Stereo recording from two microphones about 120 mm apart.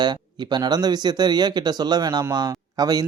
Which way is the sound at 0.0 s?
35° right (ahead or behind).